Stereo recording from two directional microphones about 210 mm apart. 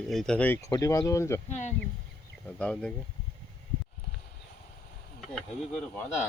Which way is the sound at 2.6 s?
5° left (ahead or behind).